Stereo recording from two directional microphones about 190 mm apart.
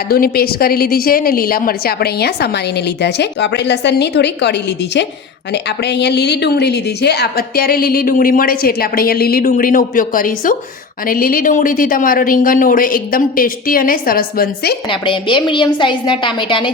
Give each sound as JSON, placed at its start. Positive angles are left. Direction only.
{"t": 0.1, "sound": "a woman's voice", "side_deg": 55}
{"t": 14.8, "sound": "a woman's voice", "side_deg": 25}